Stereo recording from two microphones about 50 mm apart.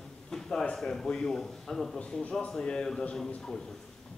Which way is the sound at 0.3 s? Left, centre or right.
Centre.